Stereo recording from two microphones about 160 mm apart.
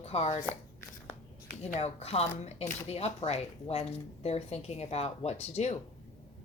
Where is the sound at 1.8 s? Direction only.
40° left (ahead or behind).